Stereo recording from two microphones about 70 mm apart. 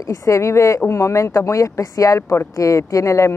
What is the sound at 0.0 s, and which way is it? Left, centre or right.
Speech, left.